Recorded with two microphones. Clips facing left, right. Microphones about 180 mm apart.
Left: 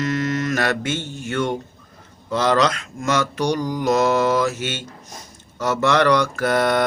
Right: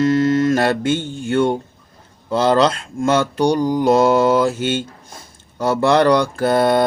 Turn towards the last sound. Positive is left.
turn(degrees=-30)  # may be behind; listen again after turning